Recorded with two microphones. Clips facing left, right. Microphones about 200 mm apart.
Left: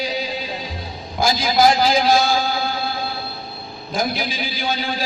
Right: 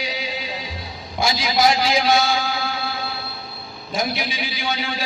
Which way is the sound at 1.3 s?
55° left (ahead or behind).